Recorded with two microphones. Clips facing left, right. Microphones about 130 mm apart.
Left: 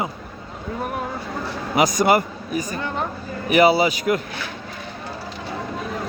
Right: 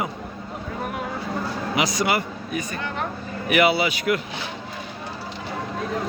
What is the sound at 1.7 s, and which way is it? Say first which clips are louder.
A man's voice: left 6 dB; 45° left (ahead or behind).